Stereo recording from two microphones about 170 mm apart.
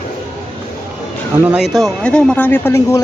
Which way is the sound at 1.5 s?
Centre (ahead or behind).